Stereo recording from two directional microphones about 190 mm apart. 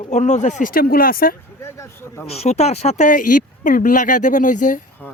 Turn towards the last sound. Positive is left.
turn(degrees=5)  # may be behind; listen again after turning